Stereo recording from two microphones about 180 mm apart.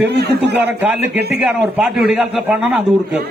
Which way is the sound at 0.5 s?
10° right (ahead or behind).